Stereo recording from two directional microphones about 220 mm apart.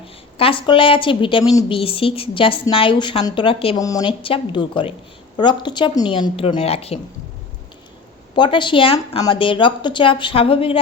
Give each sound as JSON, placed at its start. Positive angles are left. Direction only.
{"t": 0.3, "sound": "a woman's voice", "side_deg": 25}
{"t": 8.4, "sound": "a woman's voice", "side_deg": 20}